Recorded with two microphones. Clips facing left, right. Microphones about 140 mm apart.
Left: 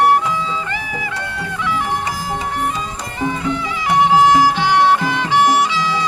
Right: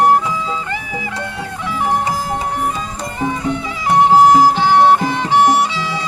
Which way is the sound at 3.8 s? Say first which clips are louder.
Right 3 dB; 45° right (ahead or behind).